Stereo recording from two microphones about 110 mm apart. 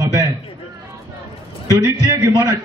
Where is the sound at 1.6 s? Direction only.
30° right (ahead or behind).